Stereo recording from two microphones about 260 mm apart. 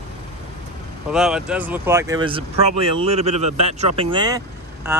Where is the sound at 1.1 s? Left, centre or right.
Centre; by 4.0 s right.